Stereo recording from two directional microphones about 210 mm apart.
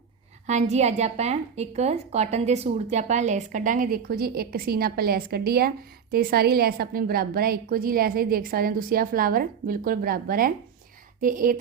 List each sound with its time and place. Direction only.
0.4 s a woman's voice: 30° right (ahead or behind)